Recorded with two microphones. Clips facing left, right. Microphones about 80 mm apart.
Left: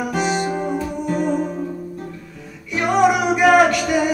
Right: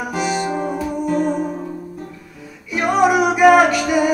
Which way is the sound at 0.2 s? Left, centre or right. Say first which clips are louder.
Right 1 dB; left.